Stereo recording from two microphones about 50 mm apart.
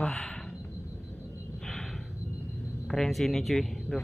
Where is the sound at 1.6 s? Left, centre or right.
Centre.